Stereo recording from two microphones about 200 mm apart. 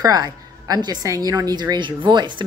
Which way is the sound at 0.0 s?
20° right (ahead or behind).